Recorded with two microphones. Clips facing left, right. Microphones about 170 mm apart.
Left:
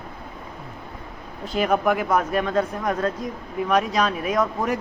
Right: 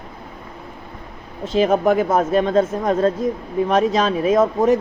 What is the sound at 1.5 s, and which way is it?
Speech, 30° right (ahead or behind).